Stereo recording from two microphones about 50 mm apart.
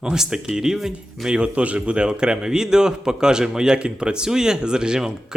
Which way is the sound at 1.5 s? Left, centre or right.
Right.